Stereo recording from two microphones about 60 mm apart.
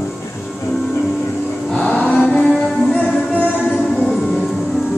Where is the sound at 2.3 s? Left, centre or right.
Centre.